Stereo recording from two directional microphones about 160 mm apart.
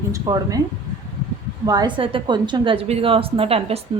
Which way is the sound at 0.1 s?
20° right (ahead or behind).